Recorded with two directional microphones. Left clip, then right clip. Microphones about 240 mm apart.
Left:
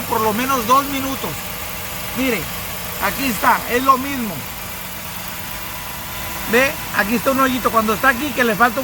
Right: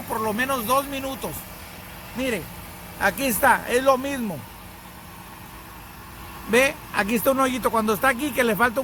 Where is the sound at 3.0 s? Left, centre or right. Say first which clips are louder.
Left 2 dB; right.